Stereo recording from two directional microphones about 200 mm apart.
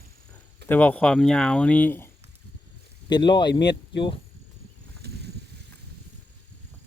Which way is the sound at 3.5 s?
60° left (ahead or behind).